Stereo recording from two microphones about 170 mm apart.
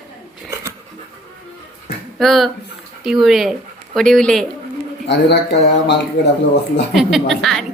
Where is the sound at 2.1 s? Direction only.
Centre (ahead or behind).